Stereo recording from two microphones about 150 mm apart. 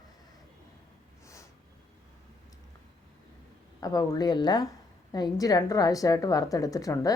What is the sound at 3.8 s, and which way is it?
Speech, 25° left (ahead or behind).